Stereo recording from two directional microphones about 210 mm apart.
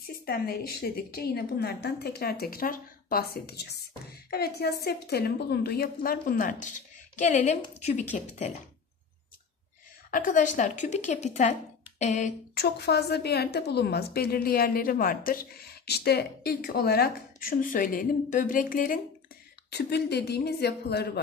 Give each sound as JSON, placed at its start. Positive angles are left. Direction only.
{"t": 0.0, "sound": "a woman's voice", "side_deg": 45}
{"t": 10.1, "sound": "a woman's voice", "side_deg": 40}
{"t": 12.5, "sound": "a woman's voice", "side_deg": 50}